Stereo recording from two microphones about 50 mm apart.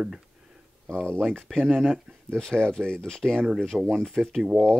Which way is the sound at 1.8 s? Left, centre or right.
Centre.